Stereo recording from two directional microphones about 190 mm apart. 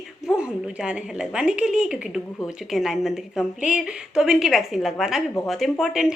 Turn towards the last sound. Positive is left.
turn(degrees=-5)  # may be behind; listen again after turning